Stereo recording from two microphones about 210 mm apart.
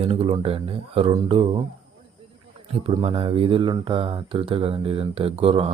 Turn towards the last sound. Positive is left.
turn(degrees=-25)  # may be behind; listen again after turning